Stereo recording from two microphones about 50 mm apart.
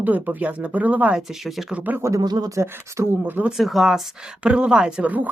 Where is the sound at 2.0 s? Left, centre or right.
Right.